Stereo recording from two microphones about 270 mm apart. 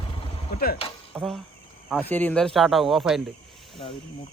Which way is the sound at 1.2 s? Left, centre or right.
Centre.